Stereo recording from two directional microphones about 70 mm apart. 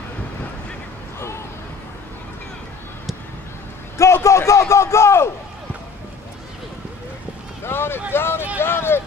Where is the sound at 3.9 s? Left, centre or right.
Left.